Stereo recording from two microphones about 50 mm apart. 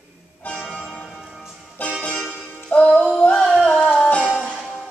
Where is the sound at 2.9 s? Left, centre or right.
Centre.